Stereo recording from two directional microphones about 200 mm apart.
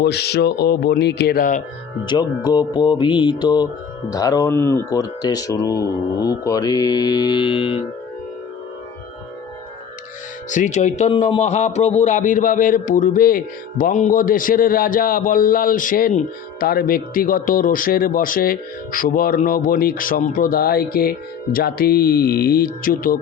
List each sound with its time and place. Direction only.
0.0 s a man's voice: 55° left (ahead or behind)
2.0 s speech: 20° left (ahead or behind)
10.5 s a man's voice: 35° left (ahead or behind)